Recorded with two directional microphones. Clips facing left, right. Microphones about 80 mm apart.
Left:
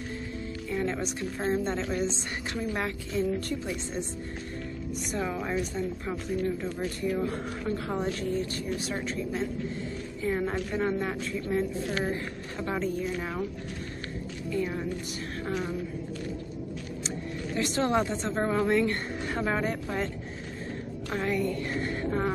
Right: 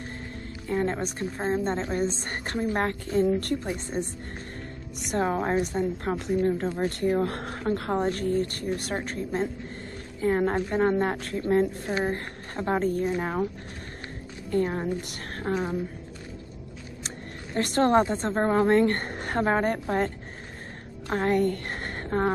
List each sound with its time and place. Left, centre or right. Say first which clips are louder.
0.7 s music: right 4 dB; right
1.5 s a woman's voice: right 2 dB; right
5.1 s a woman's voice: right 6 dB; right
14.5 s a woman's voice: right 5 dB; right
17.6 s a woman's voice: right 5 dB; right
21.1 s a woman's voice: right 5 dB; right